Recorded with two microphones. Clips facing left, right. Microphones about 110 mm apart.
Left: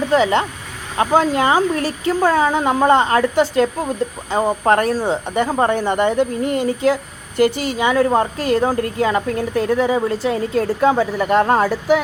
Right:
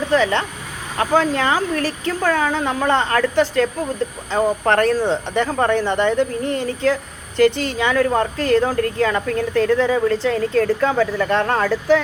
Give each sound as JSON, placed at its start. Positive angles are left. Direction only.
{"t": 0.1, "sound": "speech", "side_deg": 20}